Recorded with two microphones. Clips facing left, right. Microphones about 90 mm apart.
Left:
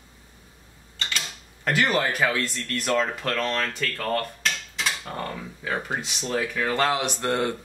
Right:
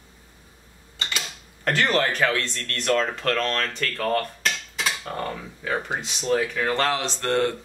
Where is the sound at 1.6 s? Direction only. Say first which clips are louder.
Right 1 dB; 5° left (ahead or behind).